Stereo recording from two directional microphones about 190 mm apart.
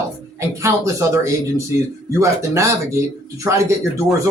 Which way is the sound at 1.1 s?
15° right (ahead or behind).